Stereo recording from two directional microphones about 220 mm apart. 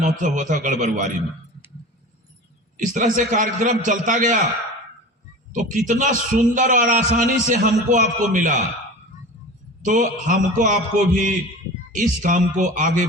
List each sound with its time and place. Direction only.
0.0 s a man's voice: 35° right (ahead or behind)
2.7 s a man's voice: 35° right (ahead or behind)
5.5 s a man's voice: 35° right (ahead or behind)
9.8 s a man's voice: 35° right (ahead or behind)